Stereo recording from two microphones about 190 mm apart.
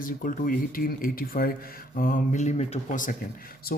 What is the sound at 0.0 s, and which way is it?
Speech, 45° left (ahead or behind).